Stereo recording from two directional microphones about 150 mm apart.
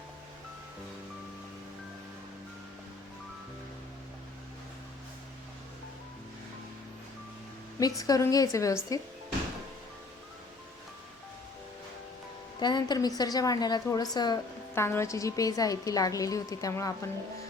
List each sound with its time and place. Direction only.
7.8 s a woman's voice: 25° left (ahead or behind)
12.5 s a woman's voice: 30° left (ahead or behind)
14.8 s a woman's voice: 15° left (ahead or behind)